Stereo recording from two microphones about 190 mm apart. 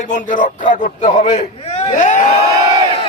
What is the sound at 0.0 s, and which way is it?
A man's voice, 40° left (ahead or behind).